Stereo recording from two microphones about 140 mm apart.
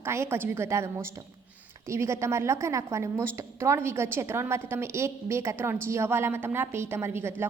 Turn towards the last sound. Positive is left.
turn(degrees=-15)  # may be behind; listen again after turning